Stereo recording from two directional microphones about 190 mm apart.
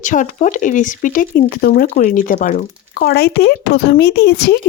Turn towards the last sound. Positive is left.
turn(degrees=60)  # may be behind; listen again after turning